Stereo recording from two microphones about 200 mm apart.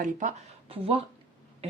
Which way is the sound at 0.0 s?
40° right (ahead or behind).